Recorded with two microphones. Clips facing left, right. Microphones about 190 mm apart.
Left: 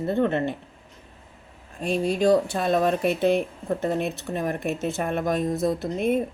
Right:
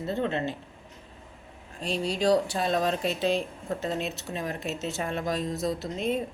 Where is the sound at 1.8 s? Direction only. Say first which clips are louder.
Left 5 dB; 55° left (ahead or behind).